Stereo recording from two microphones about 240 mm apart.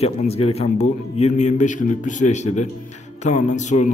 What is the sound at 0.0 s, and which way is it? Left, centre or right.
A man's voice, left.